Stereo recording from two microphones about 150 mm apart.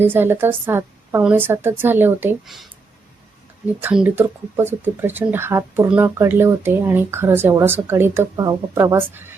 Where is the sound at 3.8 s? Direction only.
10° right (ahead or behind).